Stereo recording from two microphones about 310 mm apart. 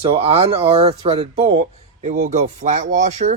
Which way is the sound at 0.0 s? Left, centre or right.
Centre.